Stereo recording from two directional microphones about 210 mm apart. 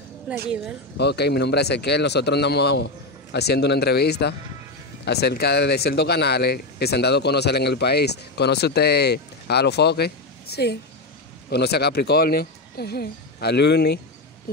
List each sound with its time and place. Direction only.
0.3 s speech: 5° right (ahead or behind)
0.9 s speech: 50° left (ahead or behind)